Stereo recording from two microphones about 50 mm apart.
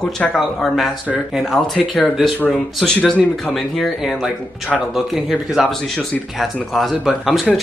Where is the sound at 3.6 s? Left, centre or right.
Centre.